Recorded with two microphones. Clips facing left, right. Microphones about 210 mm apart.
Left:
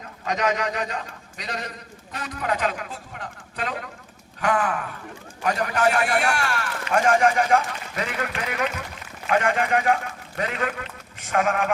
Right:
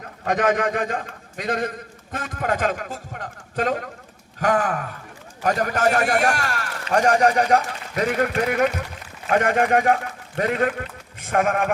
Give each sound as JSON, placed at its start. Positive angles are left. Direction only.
{"t": 0.3, "sound": "a man's voice", "side_deg": -50}